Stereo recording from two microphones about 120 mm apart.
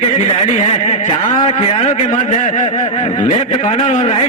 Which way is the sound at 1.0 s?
90° left.